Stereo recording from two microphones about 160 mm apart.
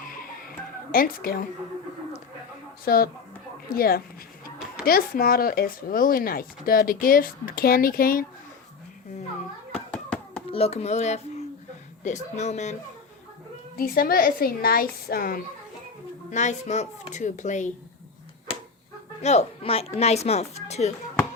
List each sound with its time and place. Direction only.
0.9 s speech: 65° left (ahead or behind)
2.8 s a woman's voice: 70° left (ahead or behind)
9.7 s hands: 5° left (ahead or behind)
10.5 s speech: 40° left (ahead or behind)
13.7 s a woman's voice: 65° left (ahead or behind)
16.3 s speech: 50° left (ahead or behind)
19.2 s a woman's voice: 40° left (ahead or behind)